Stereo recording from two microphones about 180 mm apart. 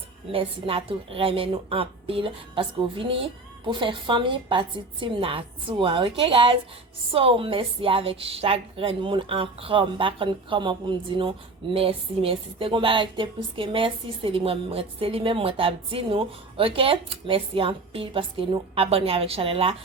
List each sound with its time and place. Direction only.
0.3 s a woman's voice: 30° right (ahead or behind)